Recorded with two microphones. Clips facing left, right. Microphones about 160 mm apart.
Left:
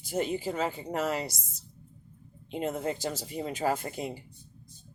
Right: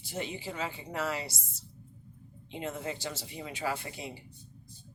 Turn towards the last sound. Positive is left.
turn(degrees=45)  # may be behind; listen again after turning